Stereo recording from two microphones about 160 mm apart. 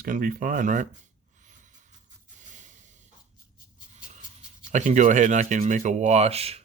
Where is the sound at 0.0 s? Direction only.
60° right (ahead or behind).